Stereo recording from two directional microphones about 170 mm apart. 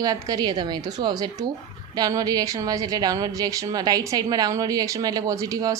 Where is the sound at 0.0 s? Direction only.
20° right (ahead or behind).